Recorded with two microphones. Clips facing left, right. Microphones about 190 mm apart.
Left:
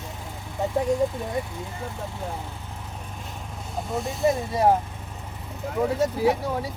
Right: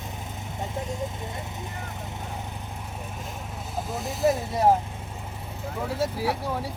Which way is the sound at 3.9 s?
Centre (ahead or behind).